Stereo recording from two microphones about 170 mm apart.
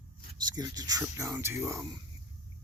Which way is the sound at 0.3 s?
25° right (ahead or behind).